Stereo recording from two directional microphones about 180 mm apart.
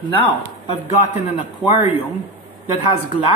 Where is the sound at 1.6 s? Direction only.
Centre (ahead or behind).